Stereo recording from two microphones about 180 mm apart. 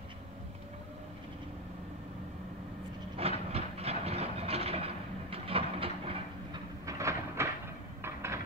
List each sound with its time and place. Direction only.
3.2 s train: 35° right (ahead or behind)
6.9 s train: 15° right (ahead or behind)
8.0 s a sound: 15° right (ahead or behind)